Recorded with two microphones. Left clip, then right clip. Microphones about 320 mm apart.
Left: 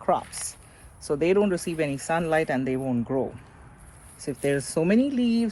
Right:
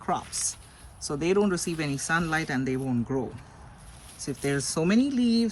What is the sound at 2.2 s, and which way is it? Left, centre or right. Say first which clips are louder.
Speech: left 4 dB; left.